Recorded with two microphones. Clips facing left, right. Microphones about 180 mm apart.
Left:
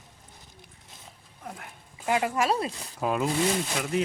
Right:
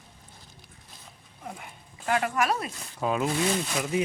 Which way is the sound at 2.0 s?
20° left (ahead or behind).